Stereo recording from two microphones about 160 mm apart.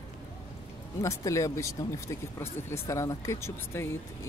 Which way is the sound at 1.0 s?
20° left (ahead or behind).